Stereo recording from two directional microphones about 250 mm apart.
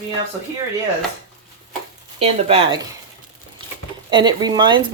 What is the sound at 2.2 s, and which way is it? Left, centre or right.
Speech, right.